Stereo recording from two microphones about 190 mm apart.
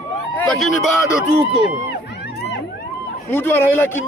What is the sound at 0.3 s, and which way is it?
Speech, 5° left (ahead or behind).